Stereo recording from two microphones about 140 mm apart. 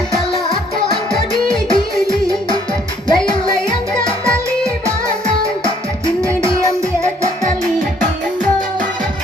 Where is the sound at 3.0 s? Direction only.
35° left (ahead or behind).